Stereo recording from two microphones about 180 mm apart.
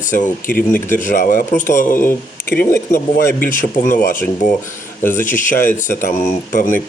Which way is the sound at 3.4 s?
50° left (ahead or behind).